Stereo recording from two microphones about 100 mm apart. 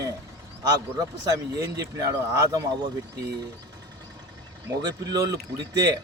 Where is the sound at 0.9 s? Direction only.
35° right (ahead or behind).